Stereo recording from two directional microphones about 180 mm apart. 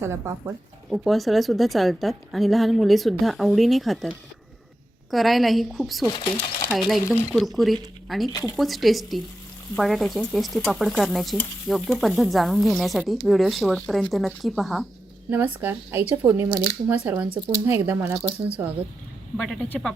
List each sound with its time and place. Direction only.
0.0 s speech: 15° right (ahead or behind)
0.9 s speech: centre (ahead or behind)
5.1 s speech: centre (ahead or behind)
6.1 s speech: 25° left (ahead or behind)
6.7 s speech: centre (ahead or behind)
8.3 s speech: 20° left (ahead or behind)
8.5 s speech: centre (ahead or behind)
19.4 s speech: 5° left (ahead or behind)